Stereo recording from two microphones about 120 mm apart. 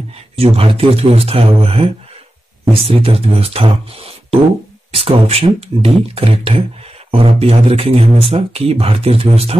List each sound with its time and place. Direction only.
0.4 s speech: 55° right (ahead or behind)